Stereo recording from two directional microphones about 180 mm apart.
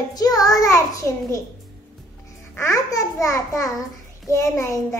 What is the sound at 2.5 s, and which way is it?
Child singing, 15° left (ahead or behind).